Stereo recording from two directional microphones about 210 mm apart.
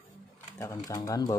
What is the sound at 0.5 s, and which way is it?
Speech, 10° left (ahead or behind).